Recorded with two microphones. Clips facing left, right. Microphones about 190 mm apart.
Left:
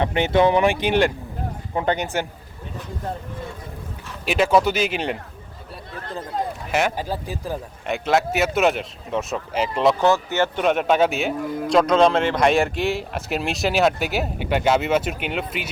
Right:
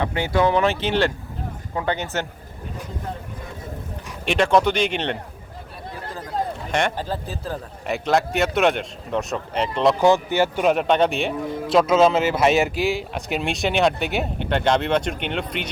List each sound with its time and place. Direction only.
0.0 s speech: 20° left (ahead or behind)
4.3 s a man's voice: 5° left (ahead or behind)
6.7 s speech: 5° left (ahead or behind)
7.9 s a man's voice: centre (ahead or behind)
10.0 s a man's voice: 15° right (ahead or behind); by 15.7 s 5° left (ahead or behind)